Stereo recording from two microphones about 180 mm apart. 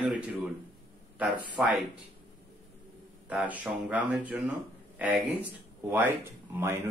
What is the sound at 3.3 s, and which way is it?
Speech, 10° right (ahead or behind).